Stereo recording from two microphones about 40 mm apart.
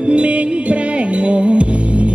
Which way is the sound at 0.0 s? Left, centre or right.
Right.